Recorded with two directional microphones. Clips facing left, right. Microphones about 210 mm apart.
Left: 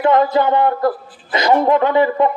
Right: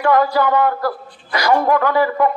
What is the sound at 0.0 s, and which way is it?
A man's voice, 20° left (ahead or behind).